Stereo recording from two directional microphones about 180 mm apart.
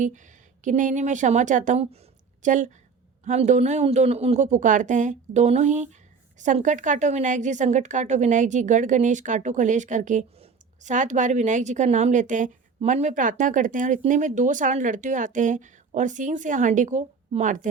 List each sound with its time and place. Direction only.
0.6 s a woman's voice: 45° right (ahead or behind)